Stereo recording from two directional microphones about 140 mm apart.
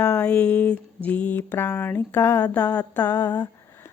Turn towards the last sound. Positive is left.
turn(degrees=25)  # may be behind; listen again after turning